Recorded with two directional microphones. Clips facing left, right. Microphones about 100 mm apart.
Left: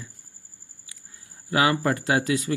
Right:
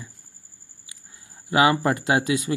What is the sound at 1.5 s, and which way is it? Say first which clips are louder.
Speech: right 3 dB; 20° right (ahead or behind).